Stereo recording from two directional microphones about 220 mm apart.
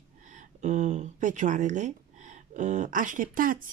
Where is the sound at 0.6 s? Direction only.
35° right (ahead or behind).